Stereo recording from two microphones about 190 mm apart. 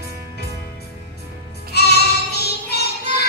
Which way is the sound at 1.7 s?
55° left (ahead or behind).